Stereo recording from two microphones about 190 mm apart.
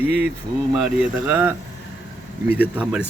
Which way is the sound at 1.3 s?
10° right (ahead or behind).